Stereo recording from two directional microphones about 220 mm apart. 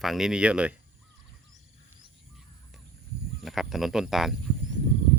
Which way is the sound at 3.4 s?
Centre (ahead or behind).